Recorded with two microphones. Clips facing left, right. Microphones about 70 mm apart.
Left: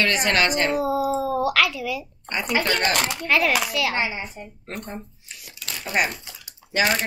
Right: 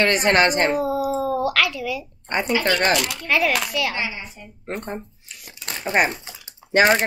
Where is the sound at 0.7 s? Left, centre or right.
Centre.